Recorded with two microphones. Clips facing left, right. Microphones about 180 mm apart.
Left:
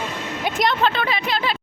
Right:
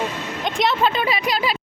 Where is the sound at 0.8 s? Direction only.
10° right (ahead or behind).